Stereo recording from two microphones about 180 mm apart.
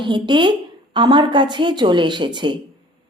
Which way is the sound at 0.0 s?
25° right (ahead or behind).